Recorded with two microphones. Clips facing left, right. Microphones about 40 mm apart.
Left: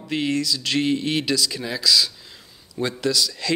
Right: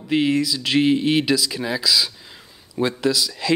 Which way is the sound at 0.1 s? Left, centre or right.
Centre.